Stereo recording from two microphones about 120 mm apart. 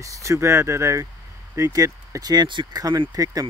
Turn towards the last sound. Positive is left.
turn(degrees=-30)  # may be behind; listen again after turning